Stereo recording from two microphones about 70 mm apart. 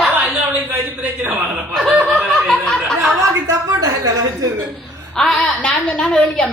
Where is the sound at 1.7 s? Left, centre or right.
Centre.